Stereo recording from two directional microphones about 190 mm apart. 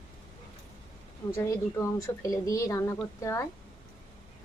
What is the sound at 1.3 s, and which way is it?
Speech, 15° left (ahead or behind).